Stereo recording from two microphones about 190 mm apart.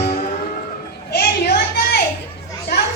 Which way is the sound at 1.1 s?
55° left (ahead or behind).